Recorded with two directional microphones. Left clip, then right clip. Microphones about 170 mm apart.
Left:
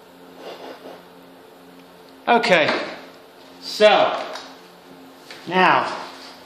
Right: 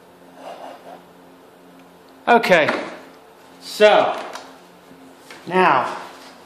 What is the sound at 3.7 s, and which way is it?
Speech, 55° right (ahead or behind).